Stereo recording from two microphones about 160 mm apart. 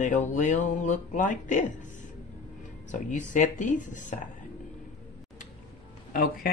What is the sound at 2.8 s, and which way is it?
Speech, 50° left (ahead or behind).